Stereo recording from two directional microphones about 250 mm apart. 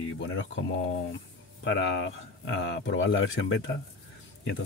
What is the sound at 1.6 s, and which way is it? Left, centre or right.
Speech, left.